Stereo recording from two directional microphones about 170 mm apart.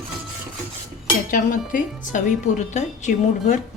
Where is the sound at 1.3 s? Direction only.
50° left (ahead or behind).